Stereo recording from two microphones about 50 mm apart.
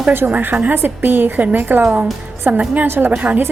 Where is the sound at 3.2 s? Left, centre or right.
Right.